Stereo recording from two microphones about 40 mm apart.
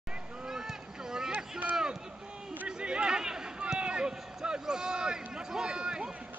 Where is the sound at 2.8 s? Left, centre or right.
Right.